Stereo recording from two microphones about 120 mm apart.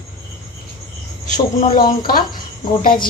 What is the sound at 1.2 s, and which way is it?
Speech, 90° left.